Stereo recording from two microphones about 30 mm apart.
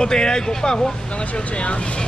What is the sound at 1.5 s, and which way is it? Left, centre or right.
Speech, left.